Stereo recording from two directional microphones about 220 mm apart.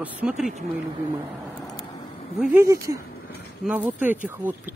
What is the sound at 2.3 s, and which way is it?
Speech, 5° right (ahead or behind).